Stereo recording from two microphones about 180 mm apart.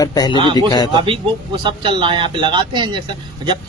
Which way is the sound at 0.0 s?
20° left (ahead or behind).